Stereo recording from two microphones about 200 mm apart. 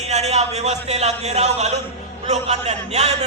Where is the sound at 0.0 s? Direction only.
35° right (ahead or behind).